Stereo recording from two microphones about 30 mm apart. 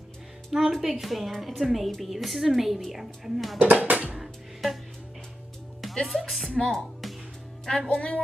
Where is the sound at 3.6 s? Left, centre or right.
Right.